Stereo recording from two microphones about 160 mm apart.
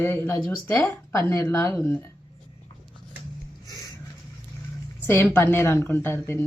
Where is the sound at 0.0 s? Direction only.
15° left (ahead or behind).